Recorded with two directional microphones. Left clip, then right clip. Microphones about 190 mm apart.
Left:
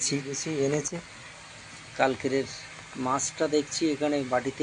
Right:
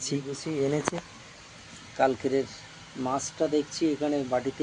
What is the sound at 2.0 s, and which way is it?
Speech, 5° right (ahead or behind).